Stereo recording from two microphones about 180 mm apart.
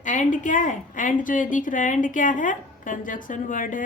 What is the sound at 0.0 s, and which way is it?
A woman's voice, 45° left (ahead or behind).